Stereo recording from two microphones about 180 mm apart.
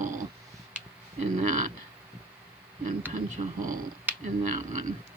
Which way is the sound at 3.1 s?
40° right (ahead or behind).